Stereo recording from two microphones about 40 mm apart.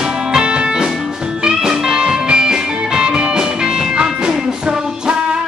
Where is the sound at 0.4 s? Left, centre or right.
Right.